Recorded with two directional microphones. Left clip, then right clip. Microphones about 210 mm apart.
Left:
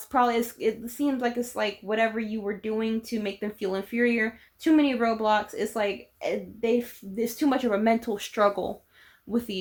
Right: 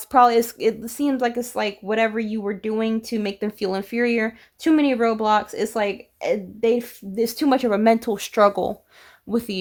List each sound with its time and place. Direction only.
0.1 s speech: 45° right (ahead or behind)